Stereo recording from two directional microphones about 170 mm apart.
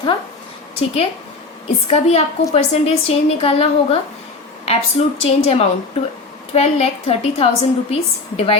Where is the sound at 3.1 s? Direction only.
35° left (ahead or behind).